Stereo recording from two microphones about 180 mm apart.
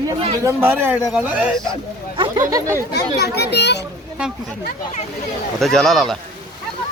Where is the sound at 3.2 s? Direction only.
65° left (ahead or behind).